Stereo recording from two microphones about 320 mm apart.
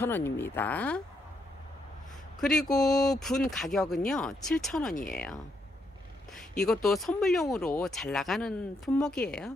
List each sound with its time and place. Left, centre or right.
0.0 s speech: centre
2.4 s speech: centre
4.9 s speech: left
6.6 s speech: centre